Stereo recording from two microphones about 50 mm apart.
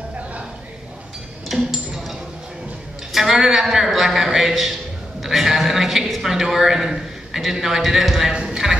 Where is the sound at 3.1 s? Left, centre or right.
Centre.